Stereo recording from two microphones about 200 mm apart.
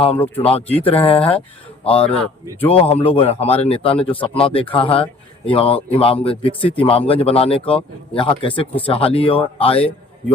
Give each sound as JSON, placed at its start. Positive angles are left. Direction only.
{"t": 0.9, "sound": "speech", "side_deg": 30}
{"t": 2.0, "sound": "speech", "side_deg": 5}
{"t": 2.6, "sound": "speech", "side_deg": 30}